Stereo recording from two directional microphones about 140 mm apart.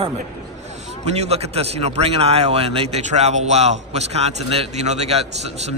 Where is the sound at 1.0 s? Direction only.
50° right (ahead or behind).